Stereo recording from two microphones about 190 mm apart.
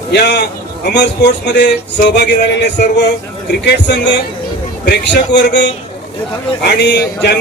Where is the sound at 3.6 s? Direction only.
65° left (ahead or behind).